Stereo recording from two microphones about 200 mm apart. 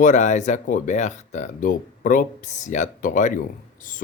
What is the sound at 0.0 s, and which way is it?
Speech, 40° left (ahead or behind).